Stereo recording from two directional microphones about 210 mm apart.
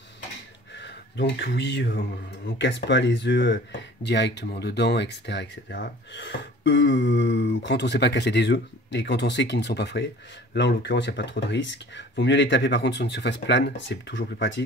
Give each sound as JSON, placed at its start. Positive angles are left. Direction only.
{"t": 0.7, "sound": "speech", "side_deg": 55}